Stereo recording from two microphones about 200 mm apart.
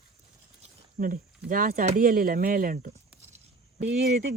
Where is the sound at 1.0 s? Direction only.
45° right (ahead or behind).